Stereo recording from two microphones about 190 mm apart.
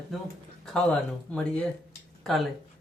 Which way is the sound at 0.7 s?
5° left (ahead or behind).